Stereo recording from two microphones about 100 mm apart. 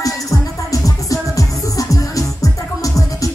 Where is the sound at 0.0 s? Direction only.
35° left (ahead or behind).